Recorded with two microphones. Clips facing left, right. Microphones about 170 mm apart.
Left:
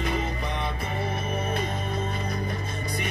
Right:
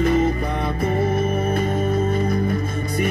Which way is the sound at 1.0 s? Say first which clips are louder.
Right 8 dB; 50° right (ahead or behind).